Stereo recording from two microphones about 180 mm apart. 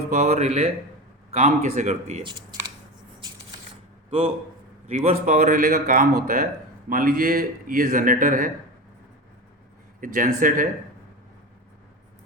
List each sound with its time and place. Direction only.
0.1 s speech: 40° right (ahead or behind)
2.2 s speech: 25° right (ahead or behind)
4.9 s speech: 40° right (ahead or behind)
10.0 s speech: 50° right (ahead or behind)